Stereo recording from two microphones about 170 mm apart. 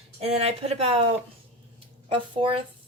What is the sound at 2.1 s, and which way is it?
Speech, 30° right (ahead or behind).